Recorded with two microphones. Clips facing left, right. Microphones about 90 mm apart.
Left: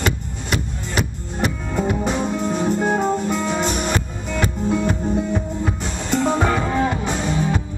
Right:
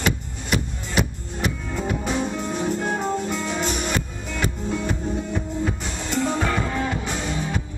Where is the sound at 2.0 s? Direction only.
30° left (ahead or behind).